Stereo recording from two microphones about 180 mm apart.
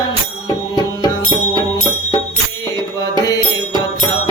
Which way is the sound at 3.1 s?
20° left (ahead or behind).